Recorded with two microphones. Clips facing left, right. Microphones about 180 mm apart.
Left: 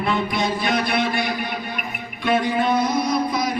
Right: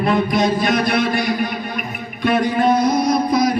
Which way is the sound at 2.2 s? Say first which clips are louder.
Right 4 dB; 45° right (ahead or behind).